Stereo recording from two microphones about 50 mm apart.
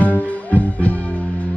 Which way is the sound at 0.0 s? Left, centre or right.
Left.